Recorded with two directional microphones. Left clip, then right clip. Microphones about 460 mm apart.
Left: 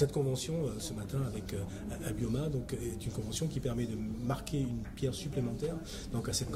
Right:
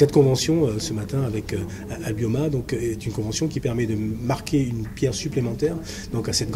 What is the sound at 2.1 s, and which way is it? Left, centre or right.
Speech, right.